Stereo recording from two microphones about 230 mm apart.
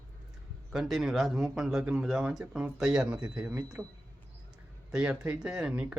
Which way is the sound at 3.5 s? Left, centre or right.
Centre.